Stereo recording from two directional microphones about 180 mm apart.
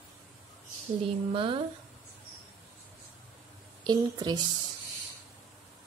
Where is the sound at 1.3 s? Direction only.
30° right (ahead or behind).